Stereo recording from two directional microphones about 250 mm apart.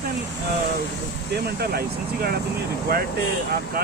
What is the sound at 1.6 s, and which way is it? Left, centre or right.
Speech, right.